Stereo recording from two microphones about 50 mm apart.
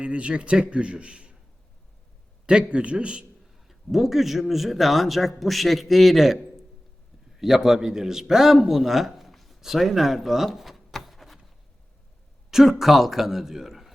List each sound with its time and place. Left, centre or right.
0.0 s a man's voice: right
2.5 s a man's voice: right
3.5 s speech: centre
12.5 s a man's voice: centre